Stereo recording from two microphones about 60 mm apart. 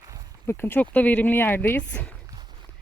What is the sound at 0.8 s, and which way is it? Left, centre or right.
Speech, left.